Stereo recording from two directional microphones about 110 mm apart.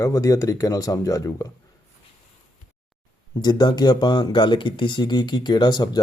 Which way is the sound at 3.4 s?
40° left (ahead or behind).